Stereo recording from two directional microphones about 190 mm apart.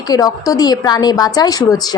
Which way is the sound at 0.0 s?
20° left (ahead or behind).